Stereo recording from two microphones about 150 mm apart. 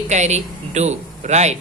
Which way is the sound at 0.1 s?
50° right (ahead or behind).